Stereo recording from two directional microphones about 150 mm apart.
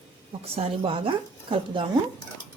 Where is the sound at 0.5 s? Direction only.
40° right (ahead or behind).